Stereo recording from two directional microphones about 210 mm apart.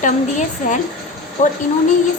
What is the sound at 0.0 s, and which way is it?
Speech, 35° left (ahead or behind).